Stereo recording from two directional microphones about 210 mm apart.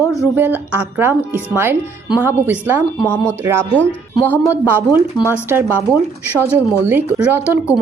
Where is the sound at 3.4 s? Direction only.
10° right (ahead or behind).